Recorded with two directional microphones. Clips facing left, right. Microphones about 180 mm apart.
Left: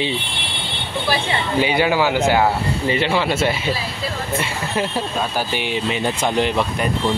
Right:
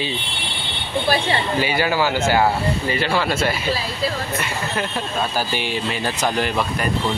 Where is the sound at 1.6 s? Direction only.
20° left (ahead or behind).